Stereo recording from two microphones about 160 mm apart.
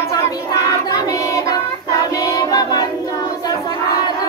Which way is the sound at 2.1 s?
25° left (ahead or behind).